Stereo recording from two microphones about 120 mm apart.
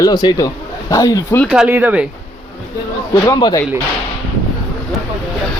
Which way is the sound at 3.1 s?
30° left (ahead or behind).